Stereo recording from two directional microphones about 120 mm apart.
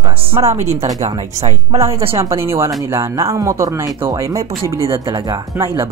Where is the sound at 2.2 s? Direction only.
20° right (ahead or behind).